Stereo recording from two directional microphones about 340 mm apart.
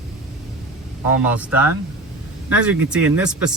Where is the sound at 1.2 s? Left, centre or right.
Centre.